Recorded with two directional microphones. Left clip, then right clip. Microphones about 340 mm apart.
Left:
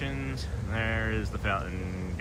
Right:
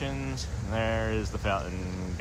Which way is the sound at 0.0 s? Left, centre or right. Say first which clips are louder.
Right 1 dB; centre.